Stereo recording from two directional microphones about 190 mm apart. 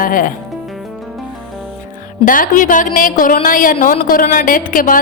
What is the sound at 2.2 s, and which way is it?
Speech, 45° left (ahead or behind).